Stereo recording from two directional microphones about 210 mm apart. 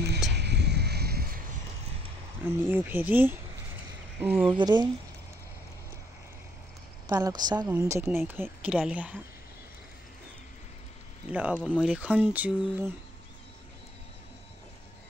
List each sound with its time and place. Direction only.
0.3 s a sound: 55° right (ahead or behind)
2.4 s a woman's voice: 10° right (ahead or behind)
4.6 s a woman's voice: 20° right (ahead or behind)
7.1 s a woman's voice: 15° right (ahead or behind)
11.2 s a woman's voice: 5° right (ahead or behind)